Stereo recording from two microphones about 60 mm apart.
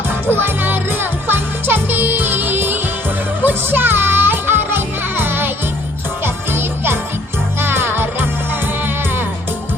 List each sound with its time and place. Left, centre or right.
0.3 s music: right